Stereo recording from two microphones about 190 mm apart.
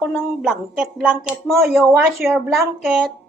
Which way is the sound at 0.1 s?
Centre (ahead or behind).